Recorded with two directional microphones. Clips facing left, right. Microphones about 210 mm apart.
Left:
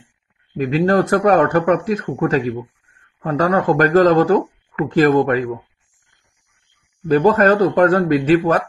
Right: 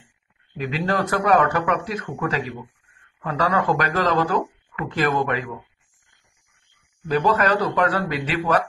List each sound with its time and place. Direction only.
0.6 s speech: 45° left (ahead or behind)
7.1 s speech: 45° left (ahead or behind)